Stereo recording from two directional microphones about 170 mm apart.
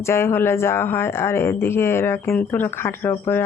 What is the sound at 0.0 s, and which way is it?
Speech, 15° left (ahead or behind).